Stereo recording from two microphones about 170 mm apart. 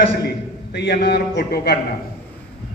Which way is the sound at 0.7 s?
80° left.